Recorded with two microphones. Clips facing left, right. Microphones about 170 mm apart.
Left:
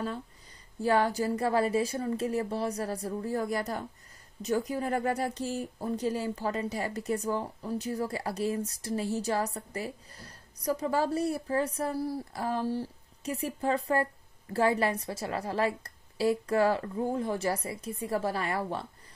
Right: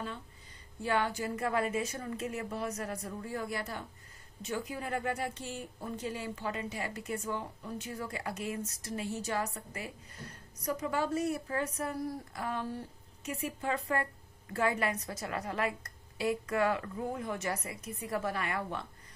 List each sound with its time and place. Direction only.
0.8 s speech: 35° left (ahead or behind)